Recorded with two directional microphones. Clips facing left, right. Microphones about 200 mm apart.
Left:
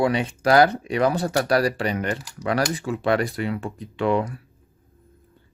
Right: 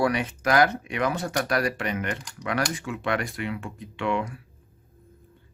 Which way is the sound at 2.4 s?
35° left (ahead or behind).